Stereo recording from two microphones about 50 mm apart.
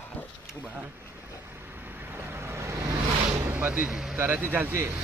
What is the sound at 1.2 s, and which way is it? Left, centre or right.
Vehicle, right.